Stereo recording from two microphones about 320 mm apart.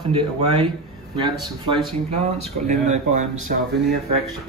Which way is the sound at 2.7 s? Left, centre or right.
Right.